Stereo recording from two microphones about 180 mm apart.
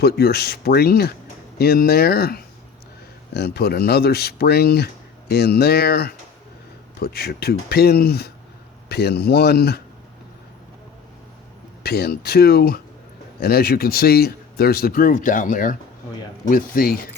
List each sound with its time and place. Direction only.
0.0 s speech: 60° left (ahead or behind)
11.8 s speech: 60° left (ahead or behind)